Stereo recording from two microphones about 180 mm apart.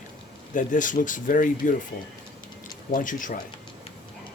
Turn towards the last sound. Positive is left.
turn(degrees=45)  # may be behind; listen again after turning